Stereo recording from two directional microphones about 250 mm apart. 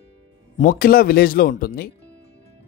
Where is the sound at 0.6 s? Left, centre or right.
Left.